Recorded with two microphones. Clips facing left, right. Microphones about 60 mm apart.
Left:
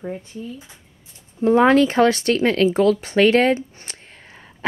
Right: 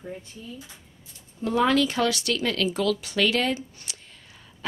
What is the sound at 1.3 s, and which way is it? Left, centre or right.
Speech, left.